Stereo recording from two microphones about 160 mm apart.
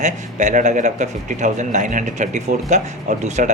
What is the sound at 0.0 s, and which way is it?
Speech, 50° right (ahead or behind).